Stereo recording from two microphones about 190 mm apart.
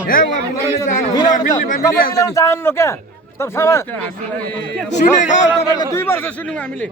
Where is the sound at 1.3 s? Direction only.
45° left (ahead or behind).